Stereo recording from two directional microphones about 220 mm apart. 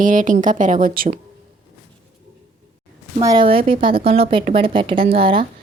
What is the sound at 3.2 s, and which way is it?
Speech, 20° right (ahead or behind).